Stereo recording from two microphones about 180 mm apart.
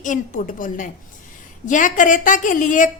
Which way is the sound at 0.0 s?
45° left (ahead or behind).